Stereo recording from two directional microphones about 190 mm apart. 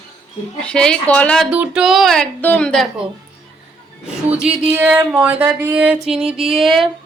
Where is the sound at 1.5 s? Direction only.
5° right (ahead or behind).